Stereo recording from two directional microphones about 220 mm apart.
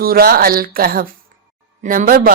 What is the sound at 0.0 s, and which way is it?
A woman's voice, 40° right (ahead or behind).